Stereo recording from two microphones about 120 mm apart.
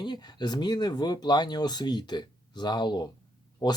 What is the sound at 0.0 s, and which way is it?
Speech, 35° left (ahead or behind).